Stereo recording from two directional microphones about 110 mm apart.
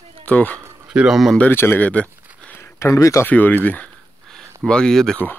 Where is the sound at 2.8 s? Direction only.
30° left (ahead or behind).